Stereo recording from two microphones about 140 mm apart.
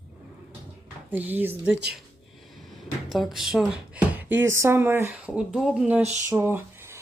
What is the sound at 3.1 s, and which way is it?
Speech, centre (ahead or behind).